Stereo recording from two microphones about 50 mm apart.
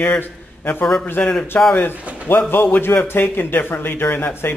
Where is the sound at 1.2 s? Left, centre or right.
Left.